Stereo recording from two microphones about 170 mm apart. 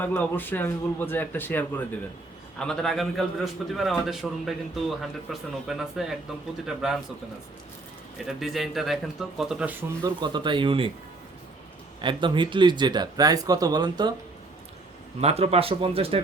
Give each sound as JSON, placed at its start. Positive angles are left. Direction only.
{"t": 0.0, "sound": "a man's voice", "side_deg": 10}
{"t": 8.2, "sound": "a man's voice", "side_deg": 0}
{"t": 10.2, "sound": "speech", "side_deg": -25}
{"t": 11.9, "sound": "speech", "side_deg": -30}
{"t": 15.2, "sound": "speech", "side_deg": -35}